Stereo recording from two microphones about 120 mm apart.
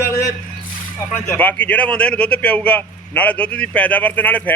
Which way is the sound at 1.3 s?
15° left (ahead or behind).